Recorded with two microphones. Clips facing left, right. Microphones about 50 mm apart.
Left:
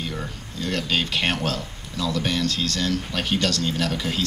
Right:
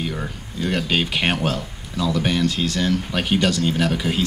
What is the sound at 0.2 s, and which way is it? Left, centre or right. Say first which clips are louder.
Speech: right 4 dB; centre.